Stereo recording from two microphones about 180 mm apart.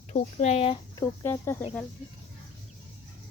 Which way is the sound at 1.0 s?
15° left (ahead or behind).